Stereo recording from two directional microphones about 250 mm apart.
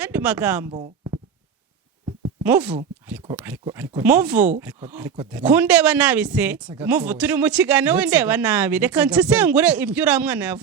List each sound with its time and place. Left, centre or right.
0.0 s speech: centre
0.7 s a sound: right
2.4 s speech: centre